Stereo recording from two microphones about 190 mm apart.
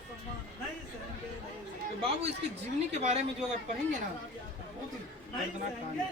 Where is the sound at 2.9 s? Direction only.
35° right (ahead or behind).